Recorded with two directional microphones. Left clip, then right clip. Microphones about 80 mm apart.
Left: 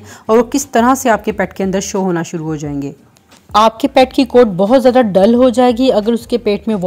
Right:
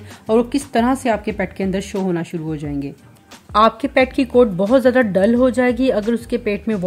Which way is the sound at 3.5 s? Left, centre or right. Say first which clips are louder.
Left 4 dB; left.